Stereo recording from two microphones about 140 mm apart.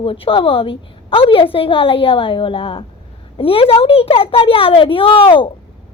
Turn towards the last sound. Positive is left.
turn(degrees=35)  # may be behind; listen again after turning